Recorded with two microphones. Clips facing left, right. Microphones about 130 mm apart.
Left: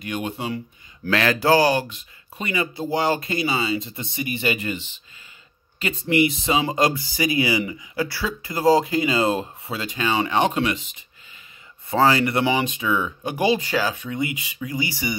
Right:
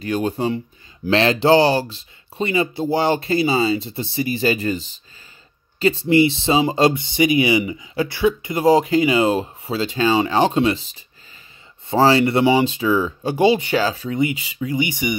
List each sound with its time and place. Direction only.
0.0 s speech: 35° right (ahead or behind); by 15.1 s 20° right (ahead or behind)